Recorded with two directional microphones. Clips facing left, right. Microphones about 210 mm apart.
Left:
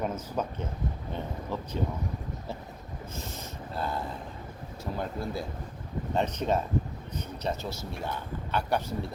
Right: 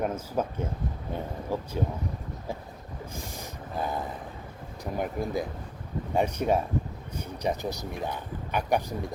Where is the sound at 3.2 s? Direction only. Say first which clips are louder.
Even; 15° right (ahead or behind).